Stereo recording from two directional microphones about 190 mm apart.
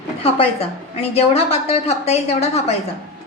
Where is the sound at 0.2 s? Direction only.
30° left (ahead or behind).